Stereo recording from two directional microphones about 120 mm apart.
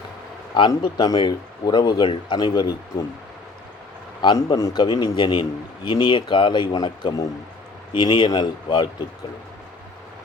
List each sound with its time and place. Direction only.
0.8 s a man's voice: 35° left (ahead or behind)
4.2 s a man's voice: 35° left (ahead or behind)